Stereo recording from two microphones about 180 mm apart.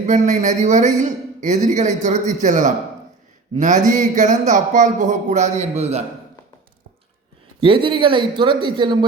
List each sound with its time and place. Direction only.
0.0 s speech: 40° right (ahead or behind)
7.6 s speech: 30° right (ahead or behind)